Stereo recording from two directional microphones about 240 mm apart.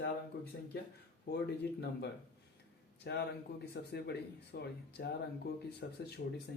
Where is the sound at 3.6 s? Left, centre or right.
Left.